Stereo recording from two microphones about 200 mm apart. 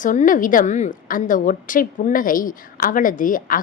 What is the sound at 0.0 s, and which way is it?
A woman's voice, 40° left (ahead or behind).